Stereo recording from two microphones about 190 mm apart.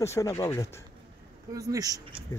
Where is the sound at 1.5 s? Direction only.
15° right (ahead or behind).